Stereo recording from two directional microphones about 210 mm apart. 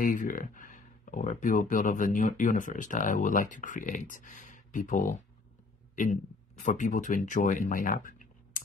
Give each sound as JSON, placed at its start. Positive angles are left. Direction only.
{"t": 0.0, "sound": "speech", "side_deg": 40}
{"t": 6.6, "sound": "speech", "side_deg": 35}